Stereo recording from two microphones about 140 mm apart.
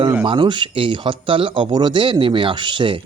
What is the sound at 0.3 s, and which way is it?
Speech, 35° right (ahead or behind).